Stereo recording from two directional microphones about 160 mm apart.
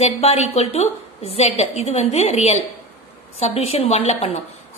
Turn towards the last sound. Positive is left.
turn(degrees=45)  # may be behind; listen again after turning